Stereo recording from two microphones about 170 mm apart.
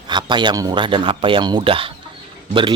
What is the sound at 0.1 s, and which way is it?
Speech, 25° right (ahead or behind).